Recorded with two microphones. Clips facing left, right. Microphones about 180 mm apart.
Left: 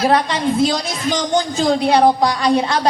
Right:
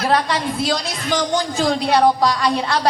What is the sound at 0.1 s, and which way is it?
A woman's voice, 20° left (ahead or behind).